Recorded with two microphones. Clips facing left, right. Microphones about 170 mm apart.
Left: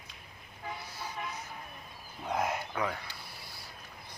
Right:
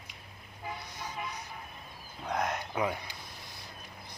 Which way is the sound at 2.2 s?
5° left (ahead or behind).